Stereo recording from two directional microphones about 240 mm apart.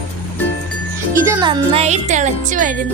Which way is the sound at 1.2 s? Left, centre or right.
Centre.